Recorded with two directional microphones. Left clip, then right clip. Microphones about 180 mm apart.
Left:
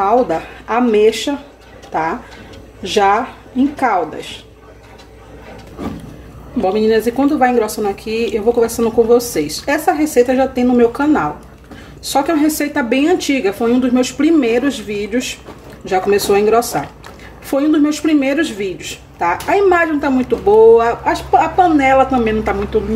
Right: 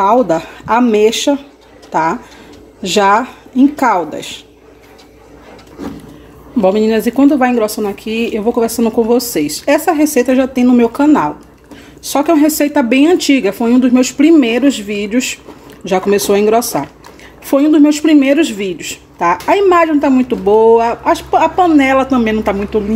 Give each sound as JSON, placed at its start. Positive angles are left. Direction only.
{"t": 0.0, "sound": "speech", "side_deg": -45}
{"t": 6.6, "sound": "speech", "side_deg": -45}